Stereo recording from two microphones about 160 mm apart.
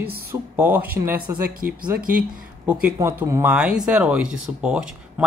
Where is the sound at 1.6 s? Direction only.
65° right (ahead or behind).